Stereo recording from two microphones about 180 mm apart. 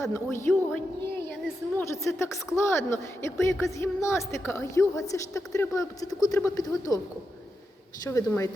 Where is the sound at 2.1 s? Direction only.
15° left (ahead or behind).